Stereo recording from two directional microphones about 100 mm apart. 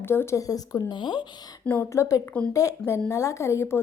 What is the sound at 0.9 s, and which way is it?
Speech, 50° left (ahead or behind).